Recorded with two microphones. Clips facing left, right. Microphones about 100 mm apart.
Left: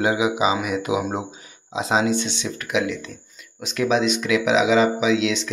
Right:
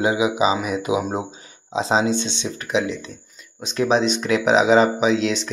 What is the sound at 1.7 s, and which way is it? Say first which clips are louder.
Speech: right 1 dB; 30° right (ahead or behind).